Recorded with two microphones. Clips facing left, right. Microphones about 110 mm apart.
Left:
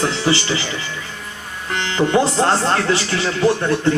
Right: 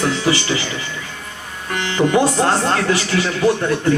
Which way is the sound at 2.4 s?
30° left (ahead or behind).